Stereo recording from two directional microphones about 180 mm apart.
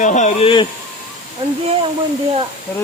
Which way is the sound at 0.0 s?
40° left (ahead or behind).